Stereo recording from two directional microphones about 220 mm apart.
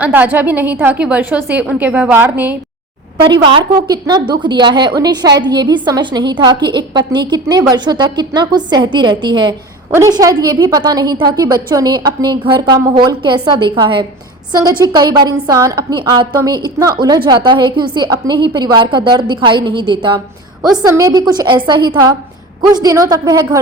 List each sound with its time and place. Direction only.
0.0 s a woman's voice: 10° right (ahead or behind)
3.2 s a woman's voice: 20° right (ahead or behind)